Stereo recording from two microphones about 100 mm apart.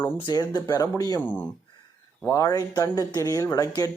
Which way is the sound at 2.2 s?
35° left (ahead or behind).